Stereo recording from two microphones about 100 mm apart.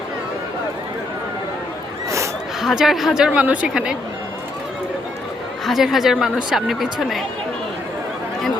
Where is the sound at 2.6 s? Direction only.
5° right (ahead or behind).